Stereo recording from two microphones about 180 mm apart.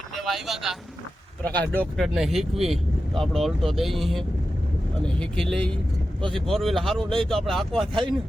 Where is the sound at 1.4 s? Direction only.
10° left (ahead or behind).